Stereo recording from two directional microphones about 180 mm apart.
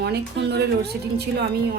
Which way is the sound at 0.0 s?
65° right (ahead or behind).